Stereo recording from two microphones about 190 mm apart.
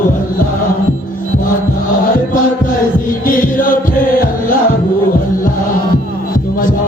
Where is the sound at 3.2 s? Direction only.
45° left (ahead or behind).